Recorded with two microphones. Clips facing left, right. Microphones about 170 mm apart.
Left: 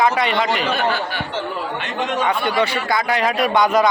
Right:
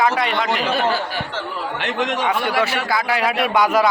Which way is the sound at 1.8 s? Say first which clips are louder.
Right 2 dB; 90° right.